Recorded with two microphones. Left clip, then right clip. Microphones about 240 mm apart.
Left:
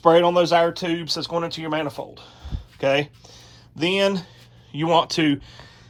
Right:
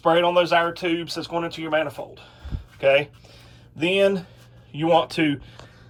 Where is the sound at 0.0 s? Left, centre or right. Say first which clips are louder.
Left 2 dB; centre.